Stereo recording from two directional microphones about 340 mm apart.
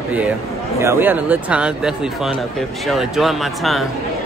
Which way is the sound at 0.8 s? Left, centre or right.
Centre.